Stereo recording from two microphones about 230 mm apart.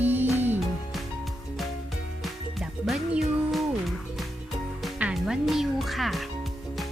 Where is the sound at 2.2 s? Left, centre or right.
Centre.